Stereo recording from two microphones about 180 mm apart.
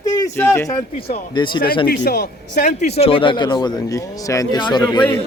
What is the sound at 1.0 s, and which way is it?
Speech, 25° left (ahead or behind).